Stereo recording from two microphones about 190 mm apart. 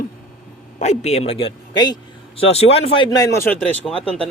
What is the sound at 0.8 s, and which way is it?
A man's voice, 35° left (ahead or behind).